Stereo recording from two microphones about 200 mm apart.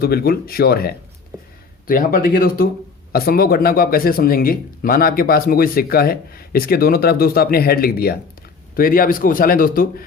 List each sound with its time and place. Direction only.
0.0 s speech: 50° left (ahead or behind)
1.3 s a sound: 15° right (ahead or behind)
1.9 s speech: 45° left (ahead or behind)